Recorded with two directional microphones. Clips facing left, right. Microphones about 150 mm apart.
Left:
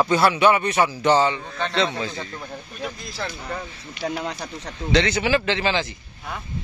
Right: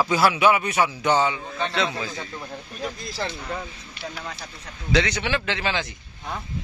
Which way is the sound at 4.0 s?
70° left (ahead or behind).